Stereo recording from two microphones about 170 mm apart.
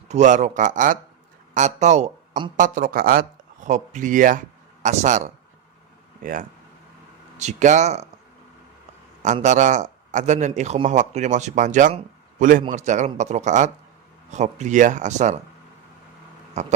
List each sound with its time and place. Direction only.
0.1 s a man's voice: 45° right (ahead or behind)
7.4 s a man's voice: 45° right (ahead or behind)
9.2 s a man's voice: 45° right (ahead or behind)
16.6 s a man's voice: 45° right (ahead or behind)